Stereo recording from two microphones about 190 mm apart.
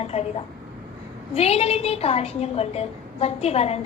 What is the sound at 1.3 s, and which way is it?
A woman's voice, 35° left (ahead or behind).